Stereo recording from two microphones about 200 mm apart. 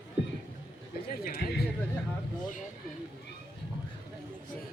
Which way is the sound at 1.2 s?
50° left (ahead or behind).